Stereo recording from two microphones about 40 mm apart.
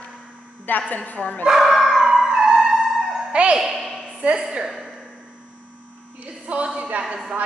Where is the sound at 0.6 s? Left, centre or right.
Left.